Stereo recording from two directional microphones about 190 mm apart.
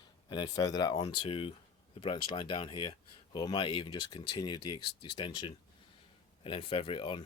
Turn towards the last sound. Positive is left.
turn(degrees=25)  # may be behind; listen again after turning